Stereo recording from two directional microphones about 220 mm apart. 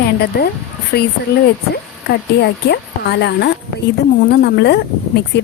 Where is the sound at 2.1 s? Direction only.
50° left (ahead or behind).